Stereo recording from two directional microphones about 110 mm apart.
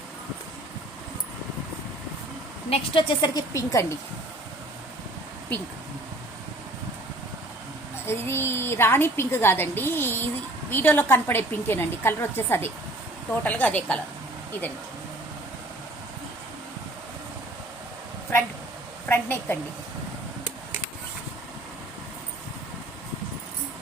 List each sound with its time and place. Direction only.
2.6 s a woman's voice: 60° left (ahead or behind)
3.2 s a woman's voice: 35° left (ahead or behind)
8.0 s a woman's voice: 25° left (ahead or behind)
19.0 s a woman's voice: 20° left (ahead or behind)